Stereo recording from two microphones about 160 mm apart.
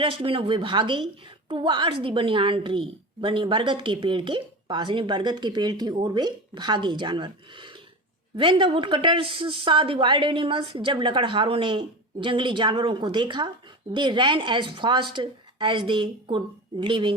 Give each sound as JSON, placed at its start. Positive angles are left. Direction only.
{"t": 0.0, "sound": "a woman's voice", "side_deg": -35}